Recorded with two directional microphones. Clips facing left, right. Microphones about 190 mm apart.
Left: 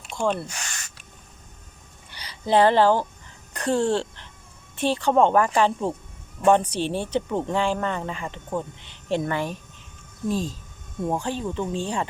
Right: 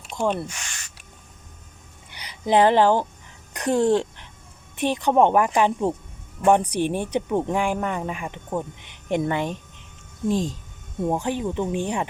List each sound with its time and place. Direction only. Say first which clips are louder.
0.2 s speech: right 1 dB; 15° right (ahead or behind)
0.5 s speech: left 2 dB; 40° left (ahead or behind)
2.0 s speech: right 1 dB; 15° right (ahead or behind)